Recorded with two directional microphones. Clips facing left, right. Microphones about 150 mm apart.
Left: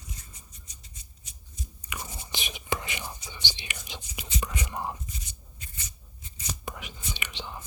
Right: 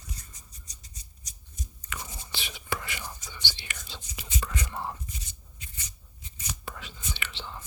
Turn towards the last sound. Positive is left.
turn(degrees=15)  # may be behind; listen again after turning